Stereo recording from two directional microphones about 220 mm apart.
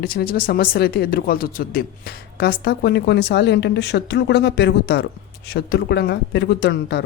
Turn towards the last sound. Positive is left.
turn(degrees=50)  # may be behind; listen again after turning